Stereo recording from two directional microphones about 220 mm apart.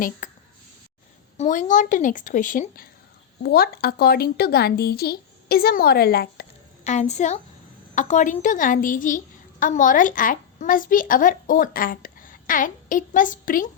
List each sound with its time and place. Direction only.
0.2 s a sound: 35° left (ahead or behind)
1.4 s a woman's voice: 35° left (ahead or behind)
6.8 s a woman's voice: 30° left (ahead or behind)